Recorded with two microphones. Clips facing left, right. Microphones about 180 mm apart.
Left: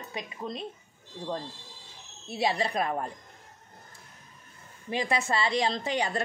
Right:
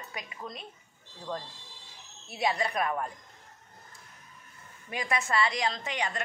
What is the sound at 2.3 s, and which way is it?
Speech, 30° left (ahead or behind).